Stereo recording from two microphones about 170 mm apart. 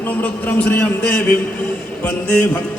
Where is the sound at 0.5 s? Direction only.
10° left (ahead or behind).